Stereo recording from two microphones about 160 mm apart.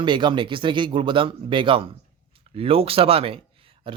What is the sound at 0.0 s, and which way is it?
Speech, 30° right (ahead or behind).